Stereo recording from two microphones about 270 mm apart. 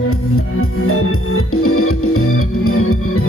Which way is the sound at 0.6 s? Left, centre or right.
Left.